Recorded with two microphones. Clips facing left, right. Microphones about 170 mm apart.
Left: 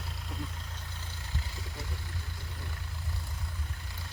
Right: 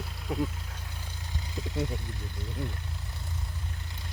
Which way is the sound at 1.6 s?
90° right.